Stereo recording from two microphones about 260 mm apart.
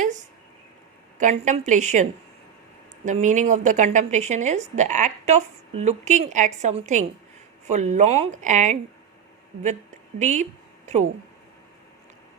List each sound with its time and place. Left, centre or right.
0.0 s a sound: right
1.2 s a woman's voice: right
10.2 s a woman's voice: right